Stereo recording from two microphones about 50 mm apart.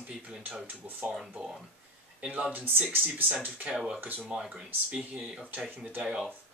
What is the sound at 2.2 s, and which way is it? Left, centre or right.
Speech, right.